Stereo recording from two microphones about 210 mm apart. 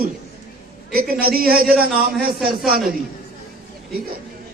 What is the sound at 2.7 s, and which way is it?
Speech, 45° right (ahead or behind).